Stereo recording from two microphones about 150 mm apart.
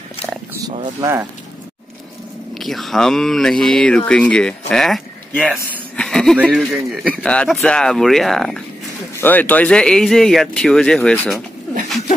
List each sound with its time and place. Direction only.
0.6 s speech: 25° right (ahead or behind)
2.5 s speech: centre (ahead or behind)
5.9 s a sound: 5° left (ahead or behind)
6.4 s speech: 5° right (ahead or behind)